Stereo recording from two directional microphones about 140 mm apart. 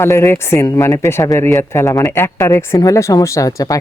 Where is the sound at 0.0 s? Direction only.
20° left (ahead or behind).